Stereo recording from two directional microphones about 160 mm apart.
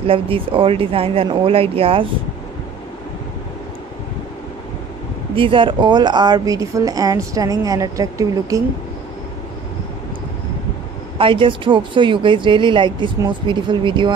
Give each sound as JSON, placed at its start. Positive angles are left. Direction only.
{"t": 0.0, "sound": "speech", "side_deg": -35}
{"t": 5.3, "sound": "a woman's voice", "side_deg": -30}
{"t": 11.1, "sound": "speech", "side_deg": -30}